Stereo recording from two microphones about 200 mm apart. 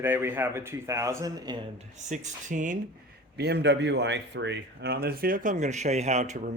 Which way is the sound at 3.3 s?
55° right (ahead or behind).